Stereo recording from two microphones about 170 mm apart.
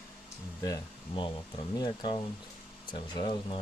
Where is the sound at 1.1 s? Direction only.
30° left (ahead or behind).